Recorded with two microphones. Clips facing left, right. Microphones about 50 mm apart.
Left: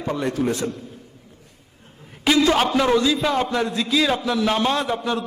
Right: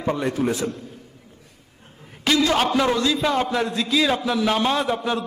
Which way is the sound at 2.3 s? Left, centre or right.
Centre.